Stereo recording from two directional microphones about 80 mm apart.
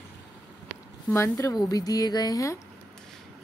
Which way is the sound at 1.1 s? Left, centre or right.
Left.